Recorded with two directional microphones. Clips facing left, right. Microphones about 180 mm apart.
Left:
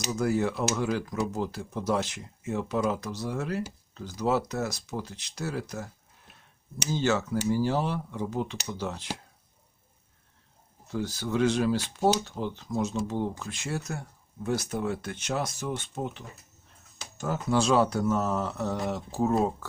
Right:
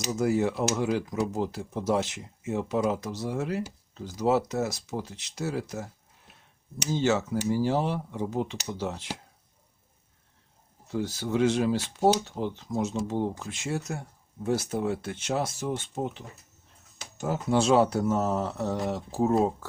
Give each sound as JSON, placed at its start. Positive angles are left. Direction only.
{"t": 0.0, "sound": "speech", "side_deg": -25}
{"t": 6.9, "sound": "speech", "side_deg": -25}
{"t": 10.9, "sound": "speech", "side_deg": -25}